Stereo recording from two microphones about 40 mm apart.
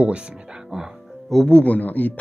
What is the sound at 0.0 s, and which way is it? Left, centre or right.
Speech, right.